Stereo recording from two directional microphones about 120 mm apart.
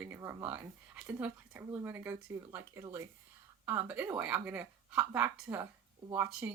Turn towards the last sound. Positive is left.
turn(degrees=-15)  # may be behind; listen again after turning